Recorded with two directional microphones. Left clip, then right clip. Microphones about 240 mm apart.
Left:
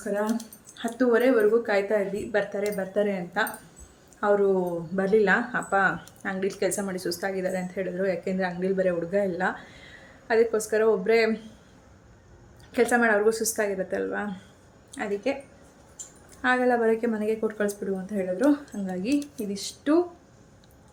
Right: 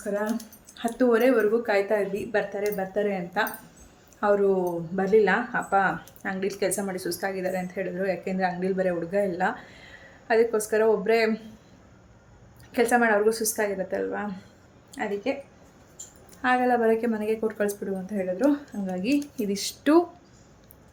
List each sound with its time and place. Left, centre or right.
0.0 s speech: centre
12.7 s speech: centre
16.4 s speech: centre
19.4 s speech: right